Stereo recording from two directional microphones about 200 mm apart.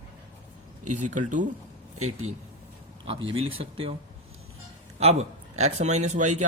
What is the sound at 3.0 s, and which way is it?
Speech, 25° right (ahead or behind).